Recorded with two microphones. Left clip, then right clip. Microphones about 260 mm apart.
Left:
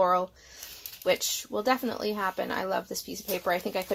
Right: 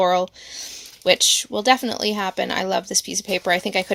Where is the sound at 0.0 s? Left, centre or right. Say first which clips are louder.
Right 6 dB; right.